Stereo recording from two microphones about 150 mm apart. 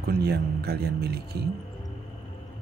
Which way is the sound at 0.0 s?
90° right.